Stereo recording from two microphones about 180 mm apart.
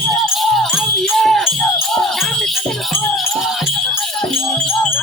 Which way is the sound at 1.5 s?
5° left (ahead or behind).